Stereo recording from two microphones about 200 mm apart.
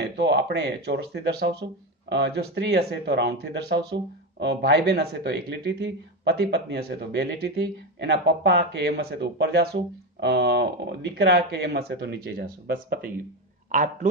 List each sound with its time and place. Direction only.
0.0 s speech: 60° right (ahead or behind)